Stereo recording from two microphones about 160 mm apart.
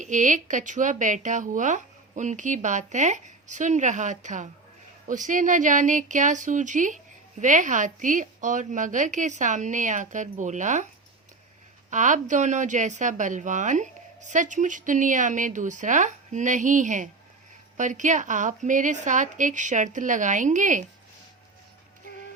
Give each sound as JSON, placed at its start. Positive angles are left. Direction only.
{"t": 0.0, "sound": "speech", "side_deg": -50}
{"t": 11.9, "sound": "speech", "side_deg": -50}